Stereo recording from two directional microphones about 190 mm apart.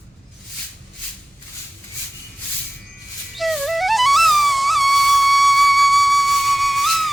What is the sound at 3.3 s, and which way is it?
Flute, centre (ahead or behind).